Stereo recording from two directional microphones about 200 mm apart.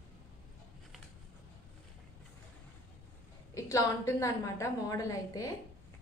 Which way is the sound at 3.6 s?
15° left (ahead or behind).